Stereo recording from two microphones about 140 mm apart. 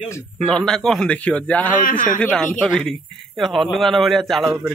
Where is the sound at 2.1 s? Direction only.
5° left (ahead or behind).